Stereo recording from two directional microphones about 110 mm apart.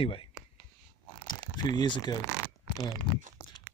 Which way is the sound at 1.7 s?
45° left (ahead or behind).